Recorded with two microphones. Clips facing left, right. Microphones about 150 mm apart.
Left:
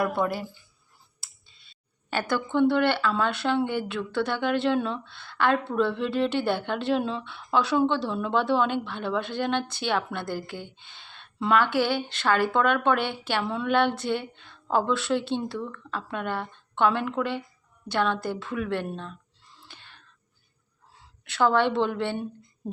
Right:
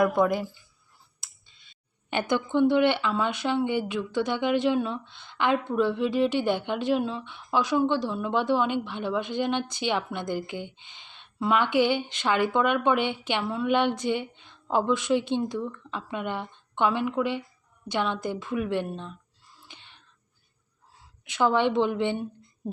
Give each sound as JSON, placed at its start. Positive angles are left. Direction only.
{"t": 0.0, "sound": "speech", "side_deg": -15}
{"t": 2.0, "sound": "speech", "side_deg": -20}
{"t": 19.6, "sound": "a sound", "side_deg": -15}
{"t": 21.2, "sound": "speech", "side_deg": -15}